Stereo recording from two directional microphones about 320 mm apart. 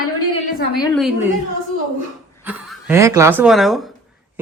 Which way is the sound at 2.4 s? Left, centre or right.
Centre.